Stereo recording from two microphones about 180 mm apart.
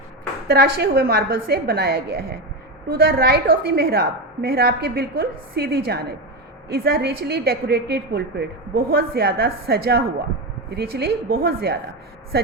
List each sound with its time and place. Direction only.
0.4 s a woman's voice: 60° right (ahead or behind)